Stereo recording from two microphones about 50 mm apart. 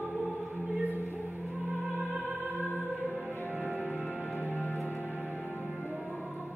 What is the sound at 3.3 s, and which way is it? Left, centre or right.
Music, left.